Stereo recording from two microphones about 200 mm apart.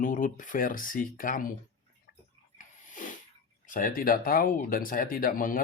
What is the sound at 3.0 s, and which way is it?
Sneeze, 40° left (ahead or behind).